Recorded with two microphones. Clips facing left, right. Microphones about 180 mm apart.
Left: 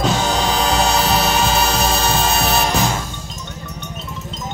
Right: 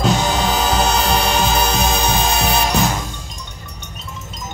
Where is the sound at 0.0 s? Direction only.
Centre (ahead or behind).